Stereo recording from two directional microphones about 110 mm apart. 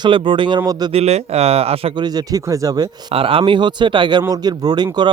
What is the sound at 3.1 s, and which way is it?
Speech, 55° right (ahead or behind).